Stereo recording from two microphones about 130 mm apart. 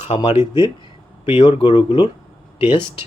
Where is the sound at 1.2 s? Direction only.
45° left (ahead or behind).